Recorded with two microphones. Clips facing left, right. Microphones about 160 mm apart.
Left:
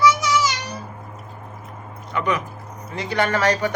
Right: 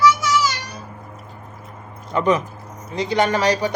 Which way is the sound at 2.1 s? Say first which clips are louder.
Right 5 dB; 35° right (ahead or behind).